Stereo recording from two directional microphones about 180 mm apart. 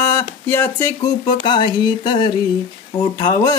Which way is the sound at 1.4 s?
25° left (ahead or behind).